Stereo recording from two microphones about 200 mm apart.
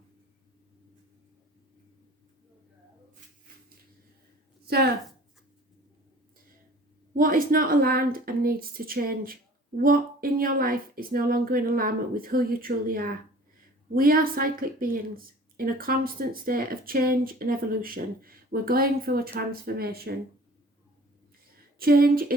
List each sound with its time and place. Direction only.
4.6 s a woman's voice: 50° right (ahead or behind)
7.1 s a woman's voice: 45° right (ahead or behind)
21.8 s a woman's voice: 50° right (ahead or behind)